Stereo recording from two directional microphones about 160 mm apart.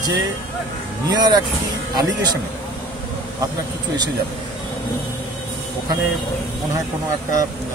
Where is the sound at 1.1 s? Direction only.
25° right (ahead or behind).